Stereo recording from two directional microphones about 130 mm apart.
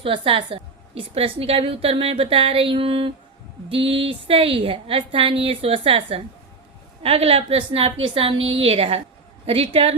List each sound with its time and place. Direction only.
0.0 s a woman's voice: 40° right (ahead or behind)